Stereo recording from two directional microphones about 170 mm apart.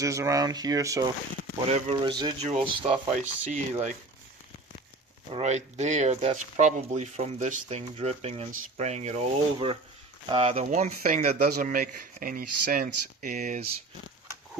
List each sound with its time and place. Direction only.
0.0 s speech: 20° right (ahead or behind); by 3.9 s 40° right (ahead or behind)
5.3 s speech: 40° right (ahead or behind)